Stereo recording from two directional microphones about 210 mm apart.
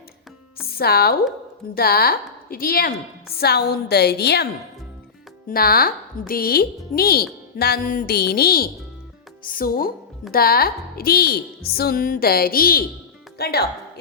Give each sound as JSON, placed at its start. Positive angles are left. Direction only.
{"t": 0.7, "sound": "a woman's voice", "side_deg": 45}
{"t": 5.5, "sound": "speech", "side_deg": 45}